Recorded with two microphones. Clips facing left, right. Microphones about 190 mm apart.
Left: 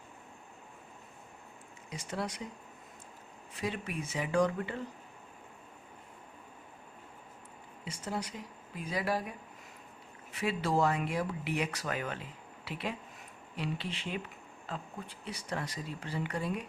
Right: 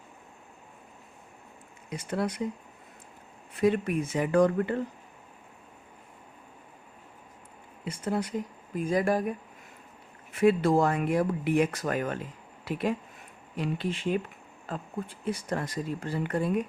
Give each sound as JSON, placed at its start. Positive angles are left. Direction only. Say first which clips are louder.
{"t": 1.9, "sound": "speech", "louder": "right 7 dB", "side_deg": -55}
{"t": 3.5, "sound": "speech", "louder": "right 12 dB", "side_deg": -55}
{"t": 7.9, "sound": "speech", "louder": "right 8 dB", "side_deg": -55}
{"t": 10.3, "sound": "speech", "louder": "right 9 dB", "side_deg": -55}